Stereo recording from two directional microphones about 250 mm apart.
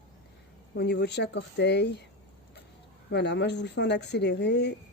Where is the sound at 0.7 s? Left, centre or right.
Left.